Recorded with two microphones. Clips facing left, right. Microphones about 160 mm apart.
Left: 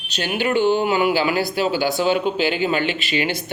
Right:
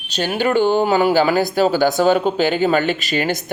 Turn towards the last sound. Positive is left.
turn(degrees=-45)  # may be behind; listen again after turning